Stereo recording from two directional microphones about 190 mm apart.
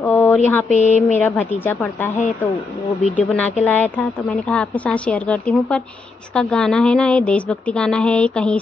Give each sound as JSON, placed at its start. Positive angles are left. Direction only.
{"t": 0.0, "sound": "a sound", "side_deg": 15}
{"t": 0.7, "sound": "speech", "side_deg": 40}
{"t": 0.9, "sound": "a woman's voice", "side_deg": 10}